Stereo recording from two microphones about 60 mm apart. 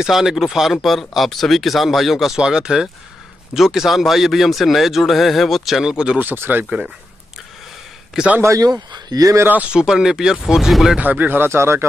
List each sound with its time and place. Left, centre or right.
0.0 s speech: centre
6.1 s speech: right
8.2 s speech: centre
8.5 s speech: right
9.7 s speech: centre
11.0 s speech: right